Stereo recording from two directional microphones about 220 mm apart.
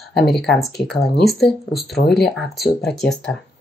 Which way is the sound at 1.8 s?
50° left (ahead or behind).